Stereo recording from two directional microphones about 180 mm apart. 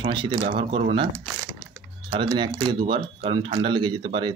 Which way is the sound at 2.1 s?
25° right (ahead or behind).